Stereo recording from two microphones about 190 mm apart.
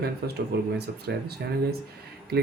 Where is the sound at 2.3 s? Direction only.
55° right (ahead or behind).